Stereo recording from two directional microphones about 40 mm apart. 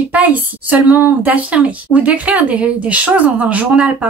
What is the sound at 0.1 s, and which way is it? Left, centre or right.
Speech, right.